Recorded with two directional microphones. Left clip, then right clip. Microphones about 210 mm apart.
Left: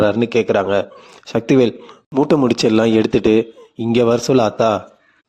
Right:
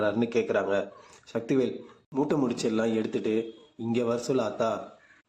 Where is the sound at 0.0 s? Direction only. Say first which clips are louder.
Left 11 dB; 40° left (ahead or behind).